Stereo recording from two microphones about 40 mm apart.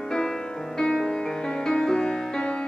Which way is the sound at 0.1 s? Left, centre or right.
Centre.